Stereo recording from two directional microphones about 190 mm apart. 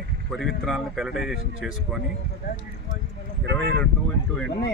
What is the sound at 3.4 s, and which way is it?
Speech, 60° right (ahead or behind).